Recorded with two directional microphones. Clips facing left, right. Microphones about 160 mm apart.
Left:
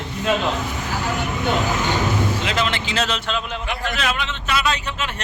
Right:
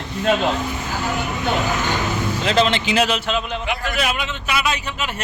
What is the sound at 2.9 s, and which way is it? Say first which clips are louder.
A man's voice: right 4 dB; 10° right (ahead or behind).